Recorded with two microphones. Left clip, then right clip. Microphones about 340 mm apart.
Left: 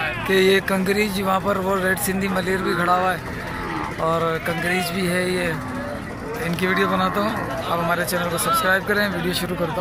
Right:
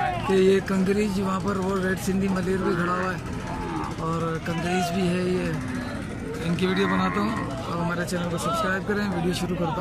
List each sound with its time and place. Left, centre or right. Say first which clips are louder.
0.3 s speech: left 4 dB; centre
4.6 s speech: even; centre
6.6 s speech: left 4 dB; centre
8.6 s speech: left 7 dB; centre